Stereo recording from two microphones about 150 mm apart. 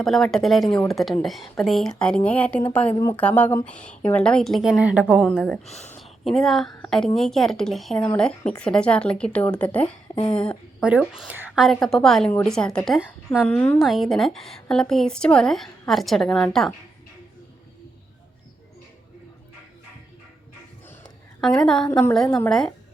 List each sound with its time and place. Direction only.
0.0 s a woman's voice: centre (ahead or behind)
10.8 s a woman's voice: 5° right (ahead or behind)
21.4 s a woman's voice: 5° left (ahead or behind)
21.8 s speech: 15° left (ahead or behind)
22.4 s a woman's voice: 5° left (ahead or behind)